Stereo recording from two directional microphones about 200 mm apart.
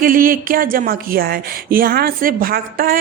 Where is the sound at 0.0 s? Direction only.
45° right (ahead or behind).